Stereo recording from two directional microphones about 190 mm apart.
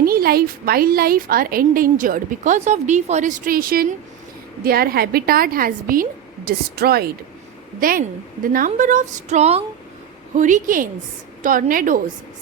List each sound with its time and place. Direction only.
0.0 s a woman's voice: 50° right (ahead or behind)